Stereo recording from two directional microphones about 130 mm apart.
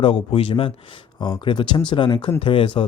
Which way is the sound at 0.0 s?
45° left (ahead or behind).